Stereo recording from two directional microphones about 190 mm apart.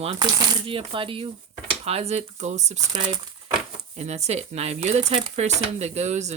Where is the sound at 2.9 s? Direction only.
25° right (ahead or behind).